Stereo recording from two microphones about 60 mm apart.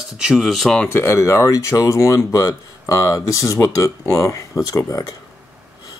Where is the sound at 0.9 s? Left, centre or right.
Left.